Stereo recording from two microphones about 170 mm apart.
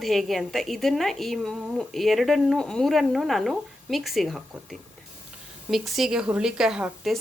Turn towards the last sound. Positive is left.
turn(degrees=-5)  # may be behind; listen again after turning